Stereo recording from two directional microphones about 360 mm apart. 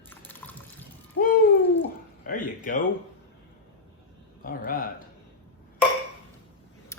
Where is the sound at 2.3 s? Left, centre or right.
Left.